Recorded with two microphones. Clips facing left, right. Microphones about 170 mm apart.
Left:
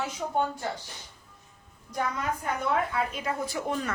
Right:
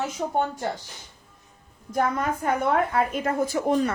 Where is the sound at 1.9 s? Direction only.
55° right (ahead or behind).